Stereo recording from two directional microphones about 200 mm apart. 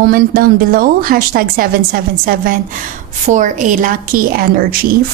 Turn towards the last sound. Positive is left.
turn(degrees=-50)  # may be behind; listen again after turning